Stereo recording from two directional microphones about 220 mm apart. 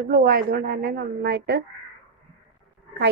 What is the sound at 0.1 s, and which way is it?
Speech, 40° right (ahead or behind).